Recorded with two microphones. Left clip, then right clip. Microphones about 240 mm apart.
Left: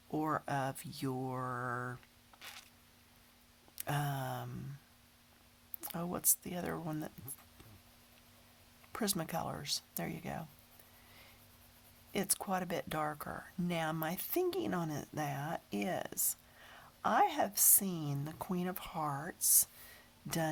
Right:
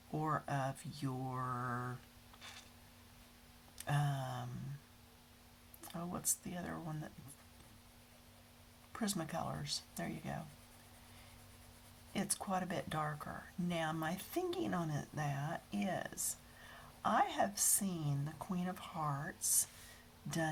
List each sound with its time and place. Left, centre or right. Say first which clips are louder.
0.2 s speech: left 3 dB; left
2.4 s a sound: left 3 dB; left
3.8 s speech: left 2 dB; left
5.8 s speech: left 5 dB; left
8.9 s speech: left 4 dB; left
12.1 s speech: left 3 dB; left